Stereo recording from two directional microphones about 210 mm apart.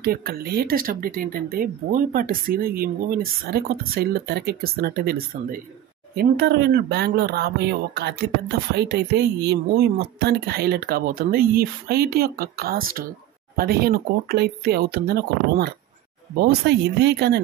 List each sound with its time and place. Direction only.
0.0 s speech: 45° right (ahead or behind)
6.1 s speech: 50° right (ahead or behind)